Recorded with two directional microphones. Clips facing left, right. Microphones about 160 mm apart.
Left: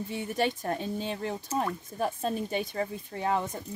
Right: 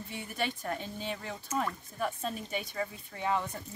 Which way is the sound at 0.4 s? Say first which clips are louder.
Left 5 dB; 35° left (ahead or behind).